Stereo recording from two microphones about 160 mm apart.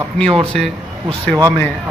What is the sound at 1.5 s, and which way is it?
Speech, 15° left (ahead or behind).